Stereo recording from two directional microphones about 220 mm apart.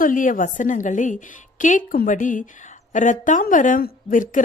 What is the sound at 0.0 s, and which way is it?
A woman's voice, 35° left (ahead or behind).